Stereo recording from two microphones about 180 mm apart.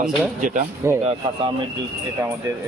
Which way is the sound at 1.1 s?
25° right (ahead or behind).